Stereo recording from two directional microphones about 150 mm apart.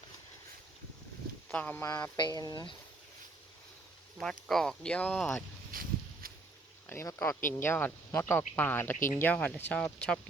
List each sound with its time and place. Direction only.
1.5 s speech: 10° left (ahead or behind); by 2.7 s 25° left (ahead or behind)
4.2 s speech: 5° left (ahead or behind)
5.7 s a sound: 65° right (ahead or behind)
6.8 s speech: 20° left (ahead or behind)